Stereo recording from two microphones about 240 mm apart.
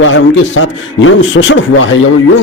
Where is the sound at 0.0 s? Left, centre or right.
Left.